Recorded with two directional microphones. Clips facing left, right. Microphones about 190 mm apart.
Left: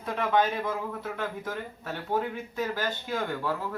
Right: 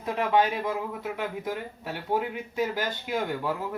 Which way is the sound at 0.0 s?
15° right (ahead or behind).